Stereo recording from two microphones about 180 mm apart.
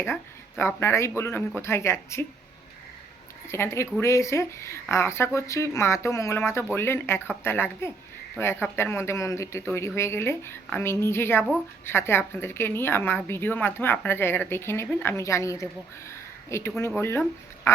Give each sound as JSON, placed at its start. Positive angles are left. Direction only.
{"t": 0.0, "sound": "a woman's voice", "side_deg": 15}
{"t": 3.5, "sound": "a woman's voice", "side_deg": 15}